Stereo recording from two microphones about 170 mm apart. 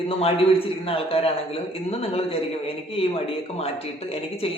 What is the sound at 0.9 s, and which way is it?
A man's voice, 35° left (ahead or behind).